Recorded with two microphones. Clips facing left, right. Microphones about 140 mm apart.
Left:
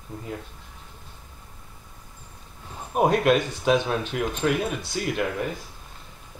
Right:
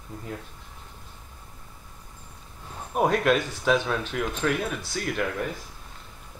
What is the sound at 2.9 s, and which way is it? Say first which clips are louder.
Speech: left 2 dB; 10° left (ahead or behind).